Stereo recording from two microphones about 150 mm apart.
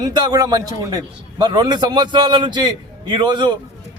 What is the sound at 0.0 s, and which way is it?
A man's voice, 25° right (ahead or behind).